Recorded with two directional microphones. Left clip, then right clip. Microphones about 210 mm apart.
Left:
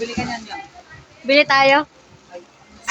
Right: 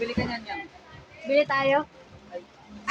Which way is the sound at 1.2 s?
55° left (ahead or behind).